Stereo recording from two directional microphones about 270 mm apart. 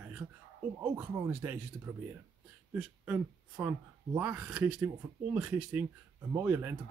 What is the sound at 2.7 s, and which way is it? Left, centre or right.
Speech, centre.